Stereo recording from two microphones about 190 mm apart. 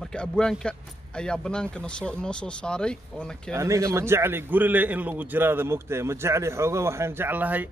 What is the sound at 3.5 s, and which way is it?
A man's voice, 15° right (ahead or behind).